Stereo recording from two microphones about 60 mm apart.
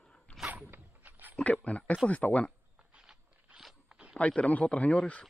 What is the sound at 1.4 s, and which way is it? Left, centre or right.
A man's voice, left.